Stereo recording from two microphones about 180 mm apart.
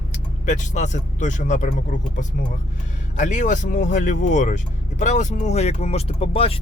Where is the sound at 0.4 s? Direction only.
40° left (ahead or behind).